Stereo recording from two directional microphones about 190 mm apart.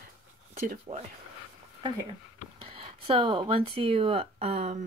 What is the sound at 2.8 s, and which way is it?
Speech, 25° right (ahead or behind).